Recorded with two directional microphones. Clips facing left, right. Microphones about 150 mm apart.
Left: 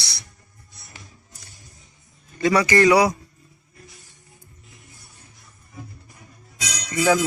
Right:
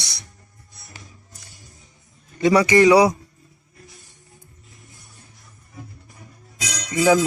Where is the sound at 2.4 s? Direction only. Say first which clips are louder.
Right 3 dB; 20° right (ahead or behind).